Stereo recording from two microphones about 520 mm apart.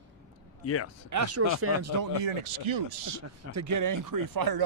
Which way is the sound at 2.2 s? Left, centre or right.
Right.